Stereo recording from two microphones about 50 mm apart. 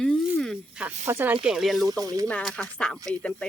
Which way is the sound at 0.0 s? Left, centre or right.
Centre.